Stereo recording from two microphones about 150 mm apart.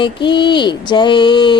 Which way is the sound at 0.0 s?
30° left (ahead or behind).